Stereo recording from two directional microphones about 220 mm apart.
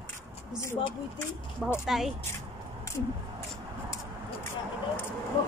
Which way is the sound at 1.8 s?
Centre (ahead or behind).